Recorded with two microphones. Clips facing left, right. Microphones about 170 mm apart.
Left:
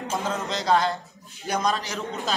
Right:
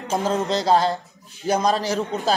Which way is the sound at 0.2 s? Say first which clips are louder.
Right 7 dB; 35° right (ahead or behind).